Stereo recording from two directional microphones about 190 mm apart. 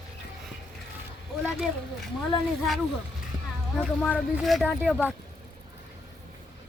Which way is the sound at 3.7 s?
5° left (ahead or behind).